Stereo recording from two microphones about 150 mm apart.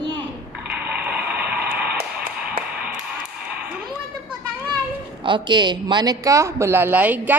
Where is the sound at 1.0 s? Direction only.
10° right (ahead or behind).